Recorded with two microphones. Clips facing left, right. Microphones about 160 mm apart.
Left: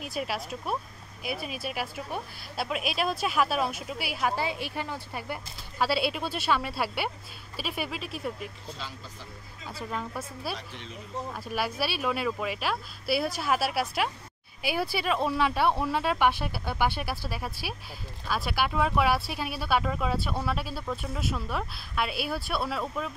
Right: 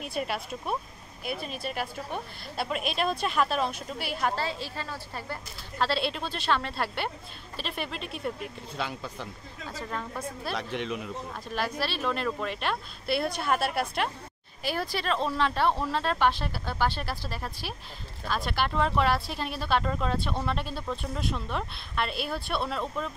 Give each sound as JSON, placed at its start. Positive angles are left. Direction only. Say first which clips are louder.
{"t": 0.0, "sound": "a woman's voice", "louder": "right 1 dB", "side_deg": 0}
{"t": 8.7, "sound": "speech", "louder": "right 8 dB", "side_deg": -60}
{"t": 9.7, "sound": "a woman's voice", "louder": "left 1 dB", "side_deg": 10}
{"t": 10.5, "sound": "speech", "louder": "right 7 dB", "side_deg": -70}
{"t": 11.4, "sound": "a woman's voice", "louder": "even", "side_deg": 10}